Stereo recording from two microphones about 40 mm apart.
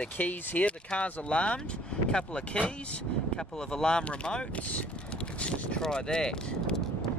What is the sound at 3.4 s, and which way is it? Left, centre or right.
Speech, centre.